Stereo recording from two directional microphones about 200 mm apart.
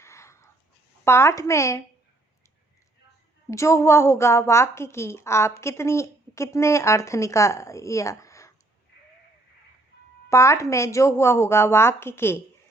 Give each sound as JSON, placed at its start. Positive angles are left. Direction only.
{"t": 0.0, "sound": "a sound", "side_deg": 15}
{"t": 1.0, "sound": "a woman's voice", "side_deg": 15}
{"t": 3.5, "sound": "a woman's voice", "side_deg": 15}
{"t": 10.2, "sound": "a woman's voice", "side_deg": 15}